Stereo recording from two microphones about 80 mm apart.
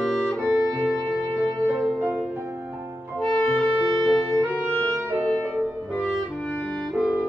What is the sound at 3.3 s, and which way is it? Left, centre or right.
Music, centre.